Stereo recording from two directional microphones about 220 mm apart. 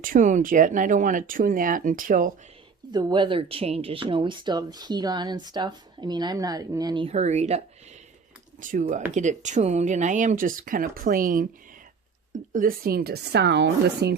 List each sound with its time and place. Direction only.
0.0 s speech: 35° right (ahead or behind)
2.9 s speech: 20° right (ahead or behind)
8.6 s a woman's voice: 35° right (ahead or behind)